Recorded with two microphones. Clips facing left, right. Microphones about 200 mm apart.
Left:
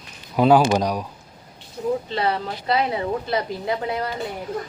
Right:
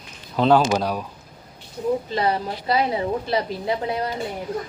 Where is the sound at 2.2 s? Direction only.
30° right (ahead or behind).